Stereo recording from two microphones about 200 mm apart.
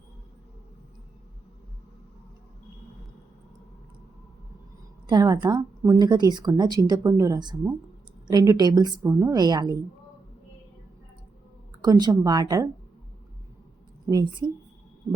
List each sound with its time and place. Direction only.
5.0 s a woman's voice: 20° right (ahead or behind)
11.8 s a woman's voice: 20° right (ahead or behind)
14.1 s a woman's voice: 20° right (ahead or behind)